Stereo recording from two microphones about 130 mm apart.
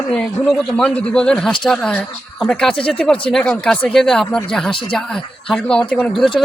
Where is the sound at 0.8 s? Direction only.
5° left (ahead or behind).